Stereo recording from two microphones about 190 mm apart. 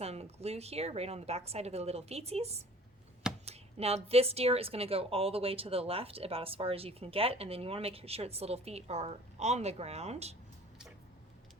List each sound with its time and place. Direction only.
0.0 s speech: 35° right (ahead or behind)